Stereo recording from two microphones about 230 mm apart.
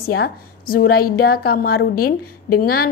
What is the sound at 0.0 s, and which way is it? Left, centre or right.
A woman's voice, left.